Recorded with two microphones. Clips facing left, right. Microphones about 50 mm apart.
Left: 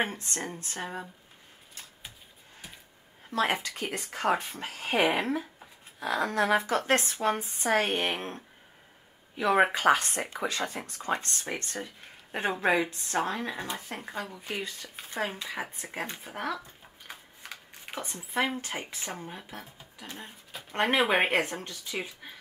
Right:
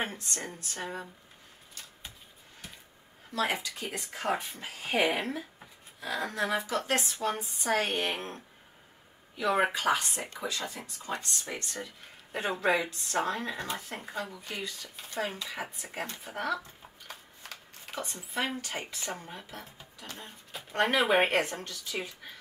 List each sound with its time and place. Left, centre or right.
0.0 s speech: left
0.7 s speech: left
3.3 s speech: left
4.0 s speech: left
9.4 s speech: left
9.7 s speech: left
11.5 s speech: left
14.6 s speech: left
17.4 s shuffling cards: centre
18.0 s speech: left